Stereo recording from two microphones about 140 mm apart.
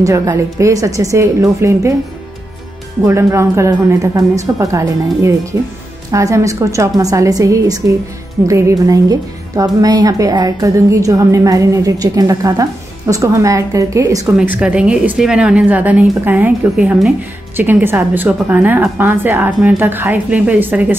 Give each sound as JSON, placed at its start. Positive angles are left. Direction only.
{"t": 0.0, "sound": "speech", "side_deg": -20}
{"t": 3.1, "sound": "speech", "side_deg": -20}
{"t": 14.2, "sound": "a woman's voice", "side_deg": -10}